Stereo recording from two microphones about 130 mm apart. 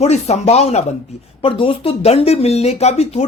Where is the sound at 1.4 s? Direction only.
45° left (ahead or behind).